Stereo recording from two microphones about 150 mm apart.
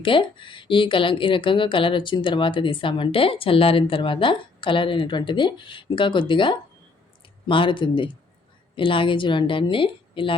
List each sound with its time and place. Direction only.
0.0 s a woman's voice: 35° left (ahead or behind)